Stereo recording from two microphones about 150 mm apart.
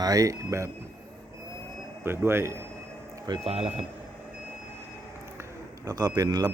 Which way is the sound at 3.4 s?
40° right (ahead or behind).